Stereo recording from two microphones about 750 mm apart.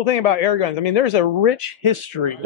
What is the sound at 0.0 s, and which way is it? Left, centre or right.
A man's voice, left.